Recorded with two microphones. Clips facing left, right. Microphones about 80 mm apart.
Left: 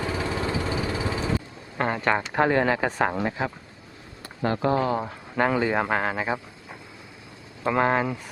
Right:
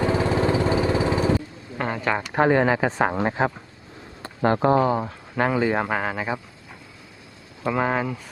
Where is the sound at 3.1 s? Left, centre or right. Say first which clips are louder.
Right 4 dB; right.